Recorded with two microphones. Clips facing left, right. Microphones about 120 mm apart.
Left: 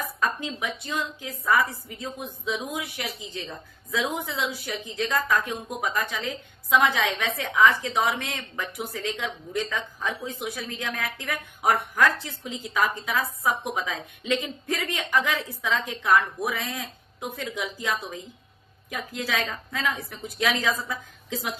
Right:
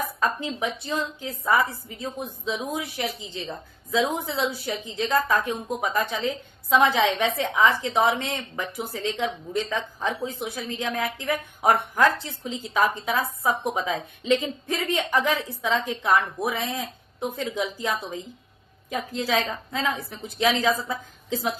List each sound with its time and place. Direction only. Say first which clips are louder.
0.2 s a woman's voice: right 1 dB; 30° right (ahead or behind)